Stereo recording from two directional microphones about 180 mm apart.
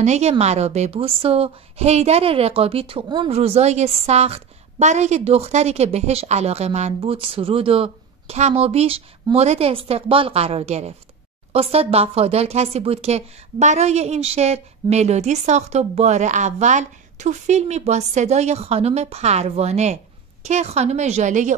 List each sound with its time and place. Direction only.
0.0 s a woman's voice: 40° right (ahead or behind)